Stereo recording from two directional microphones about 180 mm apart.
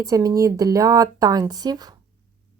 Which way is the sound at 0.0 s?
20° right (ahead or behind).